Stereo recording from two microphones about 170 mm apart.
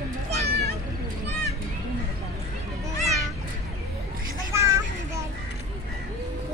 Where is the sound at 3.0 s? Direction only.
Centre (ahead or behind).